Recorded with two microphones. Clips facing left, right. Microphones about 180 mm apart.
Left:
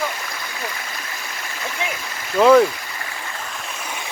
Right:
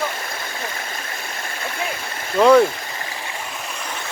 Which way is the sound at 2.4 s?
Centre (ahead or behind).